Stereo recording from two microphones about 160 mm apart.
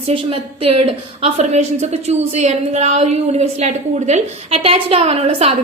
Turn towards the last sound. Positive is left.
turn(degrees=-40)  # may be behind; listen again after turning